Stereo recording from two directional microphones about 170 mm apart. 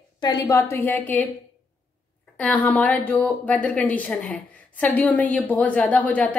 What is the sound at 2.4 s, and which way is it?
A woman's voice, 10° left (ahead or behind).